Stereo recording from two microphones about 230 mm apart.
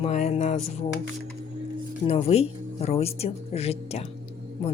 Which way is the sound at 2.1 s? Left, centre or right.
Left.